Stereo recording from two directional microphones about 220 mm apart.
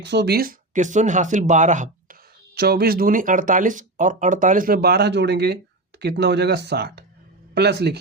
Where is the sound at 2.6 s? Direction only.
45° right (ahead or behind).